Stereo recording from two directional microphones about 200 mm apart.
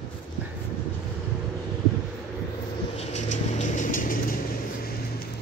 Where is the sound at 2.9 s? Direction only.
35° left (ahead or behind).